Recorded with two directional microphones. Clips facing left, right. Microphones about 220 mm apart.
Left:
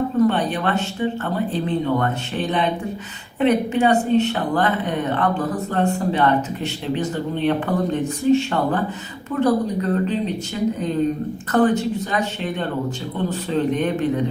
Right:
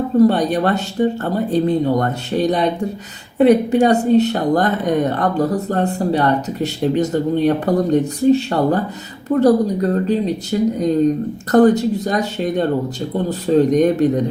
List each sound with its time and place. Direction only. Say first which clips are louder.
0.2 s speech: right 6 dB; 40° right (ahead or behind)